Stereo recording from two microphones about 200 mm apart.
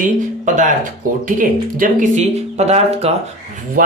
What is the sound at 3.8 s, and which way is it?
Speech, 45° right (ahead or behind).